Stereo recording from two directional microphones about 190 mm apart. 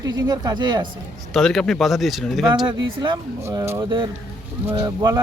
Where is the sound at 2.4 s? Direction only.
20° right (ahead or behind).